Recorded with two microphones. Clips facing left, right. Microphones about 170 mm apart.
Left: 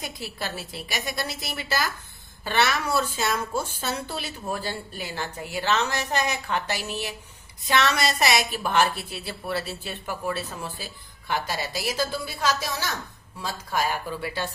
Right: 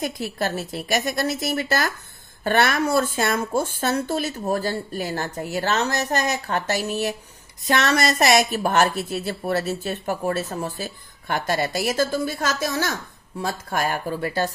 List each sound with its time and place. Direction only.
0.0 s a woman's voice: 50° right (ahead or behind)